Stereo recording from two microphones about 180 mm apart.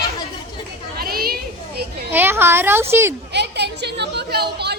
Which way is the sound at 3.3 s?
70° right (ahead or behind).